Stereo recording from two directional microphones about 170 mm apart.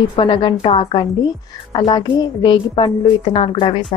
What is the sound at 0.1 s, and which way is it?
A woman's voice, 30° left (ahead or behind).